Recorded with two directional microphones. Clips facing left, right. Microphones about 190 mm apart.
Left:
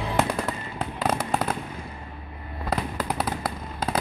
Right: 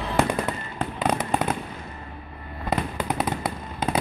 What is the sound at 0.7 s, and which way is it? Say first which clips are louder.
Fireworks: right 2 dB; centre (ahead or behind).